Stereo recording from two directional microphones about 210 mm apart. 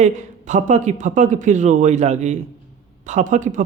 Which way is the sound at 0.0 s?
35° right (ahead or behind).